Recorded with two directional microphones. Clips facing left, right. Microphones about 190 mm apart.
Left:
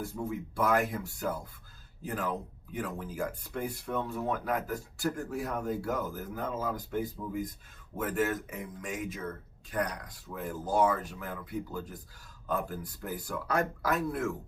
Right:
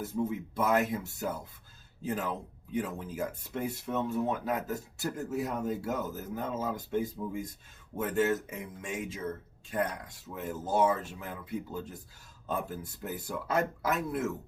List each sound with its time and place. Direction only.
0.0 s speech: 20° right (ahead or behind)